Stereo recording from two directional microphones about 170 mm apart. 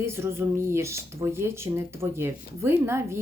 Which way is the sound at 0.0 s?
15° right (ahead or behind).